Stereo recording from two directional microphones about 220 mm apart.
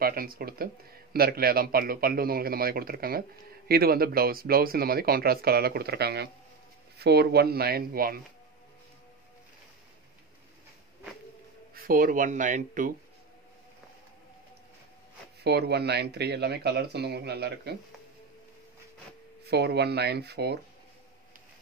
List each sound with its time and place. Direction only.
0.0 s a man's voice: 40° right (ahead or behind)
11.7 s speech: 40° right (ahead or behind)
15.4 s a man's voice: 50° right (ahead or behind)
19.4 s a man's voice: 50° right (ahead or behind)